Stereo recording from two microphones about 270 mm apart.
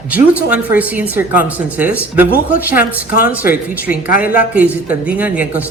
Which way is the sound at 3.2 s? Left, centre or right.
Left.